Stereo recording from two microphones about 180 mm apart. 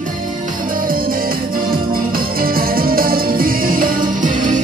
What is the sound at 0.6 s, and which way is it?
Music, 50° right (ahead or behind).